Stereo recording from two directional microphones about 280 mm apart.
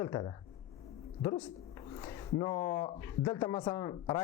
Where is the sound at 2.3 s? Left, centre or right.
Centre.